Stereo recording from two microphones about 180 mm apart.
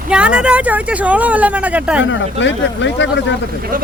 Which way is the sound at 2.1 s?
90° left.